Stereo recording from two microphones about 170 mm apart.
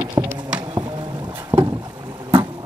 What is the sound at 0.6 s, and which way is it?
Music, 25° right (ahead or behind).